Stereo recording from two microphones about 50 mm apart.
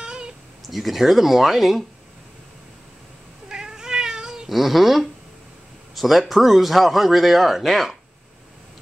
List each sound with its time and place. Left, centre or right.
0.0 s a sound: centre
0.7 s speech: centre
3.4 s cat: centre
4.5 s speech: centre